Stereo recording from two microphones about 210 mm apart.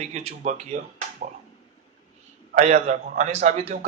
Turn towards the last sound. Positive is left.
turn(degrees=-35)  # may be behind; listen again after turning